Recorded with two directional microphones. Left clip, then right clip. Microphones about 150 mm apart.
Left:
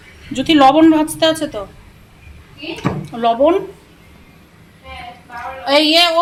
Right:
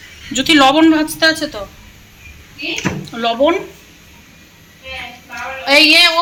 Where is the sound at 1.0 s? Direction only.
30° left (ahead or behind).